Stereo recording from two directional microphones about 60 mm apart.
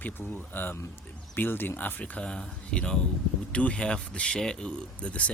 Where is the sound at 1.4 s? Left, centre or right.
Left.